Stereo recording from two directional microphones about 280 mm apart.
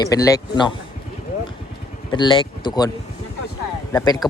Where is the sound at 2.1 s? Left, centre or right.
Centre.